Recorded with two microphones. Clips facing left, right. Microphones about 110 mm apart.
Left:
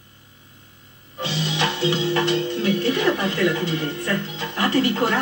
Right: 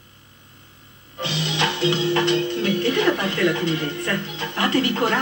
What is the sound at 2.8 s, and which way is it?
Television, 15° left (ahead or behind).